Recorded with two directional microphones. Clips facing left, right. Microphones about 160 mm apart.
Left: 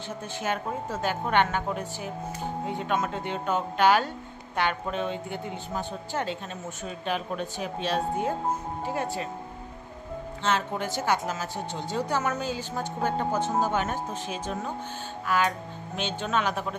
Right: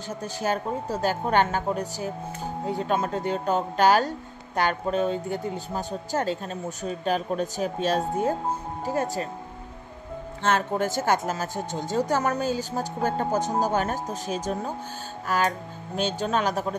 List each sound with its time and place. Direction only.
0.2 s speech: 35° right (ahead or behind)
10.4 s speech: 50° right (ahead or behind)